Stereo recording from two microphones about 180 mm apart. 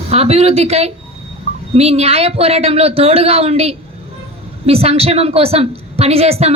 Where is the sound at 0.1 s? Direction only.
35° right (ahead or behind).